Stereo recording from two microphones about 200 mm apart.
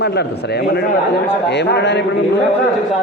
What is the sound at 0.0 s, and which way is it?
A woman's voice, 55° left (ahead or behind).